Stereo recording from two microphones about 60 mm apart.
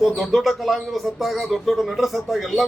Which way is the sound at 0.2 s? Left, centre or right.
Centre.